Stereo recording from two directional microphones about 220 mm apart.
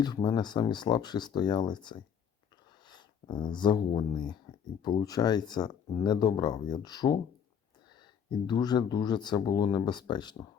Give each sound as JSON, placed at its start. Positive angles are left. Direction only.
{"t": 0.0, "sound": "speech", "side_deg": 20}
{"t": 8.3, "sound": "speech", "side_deg": 20}